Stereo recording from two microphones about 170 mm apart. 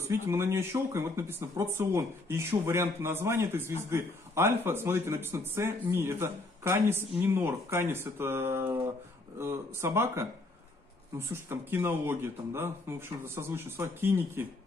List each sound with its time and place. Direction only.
0.1 s speech: 15° right (ahead or behind)